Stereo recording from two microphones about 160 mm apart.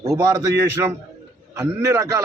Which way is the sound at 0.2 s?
20° right (ahead or behind).